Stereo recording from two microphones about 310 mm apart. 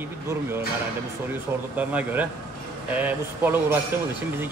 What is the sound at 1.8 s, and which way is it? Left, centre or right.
Speech, centre.